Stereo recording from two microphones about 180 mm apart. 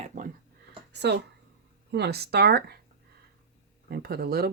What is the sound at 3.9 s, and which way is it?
Speech, 60° right (ahead or behind).